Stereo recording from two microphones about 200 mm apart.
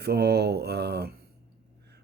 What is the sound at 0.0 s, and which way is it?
Speech, 55° right (ahead or behind).